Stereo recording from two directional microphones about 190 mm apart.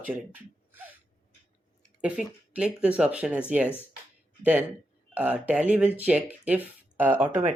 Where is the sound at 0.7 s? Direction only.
10° right (ahead or behind).